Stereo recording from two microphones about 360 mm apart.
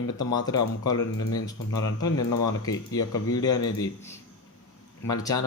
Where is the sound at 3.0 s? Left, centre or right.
Left.